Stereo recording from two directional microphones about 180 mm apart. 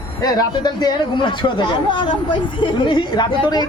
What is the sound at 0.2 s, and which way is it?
Speech, 20° left (ahead or behind).